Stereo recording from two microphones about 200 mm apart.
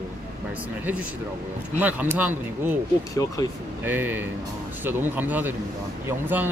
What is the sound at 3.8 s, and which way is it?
Speech, 10° right (ahead or behind).